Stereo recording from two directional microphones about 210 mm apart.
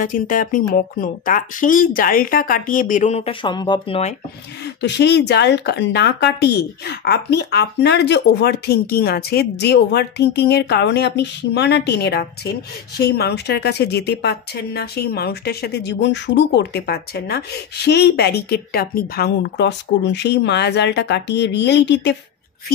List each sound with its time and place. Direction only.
0.0 s speech: 40° left (ahead or behind); by 4.0 s 20° left (ahead or behind)
4.8 s speech: 55° left (ahead or behind)